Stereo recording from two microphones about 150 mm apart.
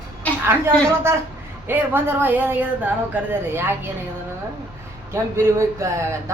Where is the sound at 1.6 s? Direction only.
15° right (ahead or behind).